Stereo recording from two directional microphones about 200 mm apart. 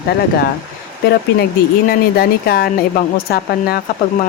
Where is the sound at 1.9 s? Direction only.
50° left (ahead or behind).